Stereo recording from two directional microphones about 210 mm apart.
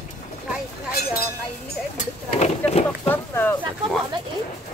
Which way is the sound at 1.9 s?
30° left (ahead or behind).